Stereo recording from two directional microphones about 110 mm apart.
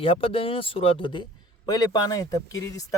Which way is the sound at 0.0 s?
55° left (ahead or behind).